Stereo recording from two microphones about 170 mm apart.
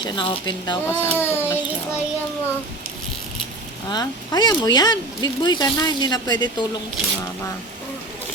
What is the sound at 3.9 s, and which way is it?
Speech, 25° left (ahead or behind).